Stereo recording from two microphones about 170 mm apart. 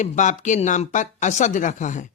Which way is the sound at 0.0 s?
45° left (ahead or behind).